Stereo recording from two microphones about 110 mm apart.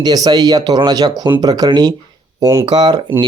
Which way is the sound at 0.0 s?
40° right (ahead or behind).